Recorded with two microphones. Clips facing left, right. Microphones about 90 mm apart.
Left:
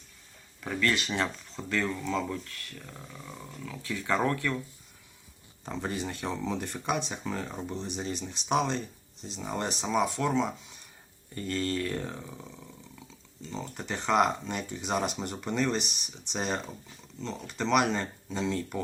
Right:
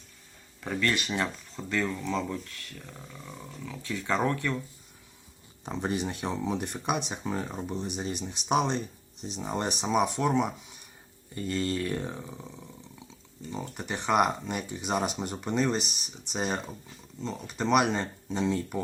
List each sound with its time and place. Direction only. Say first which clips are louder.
0.8 s speech: even; 20° right (ahead or behind)
2.8 s speech: even; 5° left (ahead or behind)
3.8 s speech: even; 20° right (ahead or behind)
5.6 s speech: right 3 dB; 20° right (ahead or behind)